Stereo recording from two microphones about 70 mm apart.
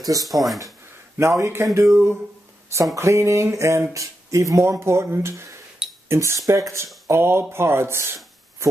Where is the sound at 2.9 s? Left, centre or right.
Right.